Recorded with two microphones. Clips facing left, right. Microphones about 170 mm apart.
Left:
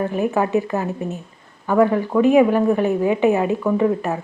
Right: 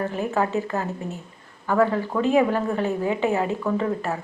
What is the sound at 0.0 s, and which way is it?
A woman's voice, 15° left (ahead or behind).